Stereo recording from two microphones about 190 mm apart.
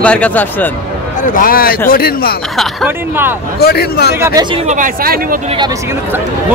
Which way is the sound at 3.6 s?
55° left (ahead or behind).